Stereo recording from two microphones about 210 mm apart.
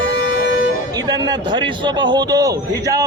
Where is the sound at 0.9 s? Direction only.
20° right (ahead or behind).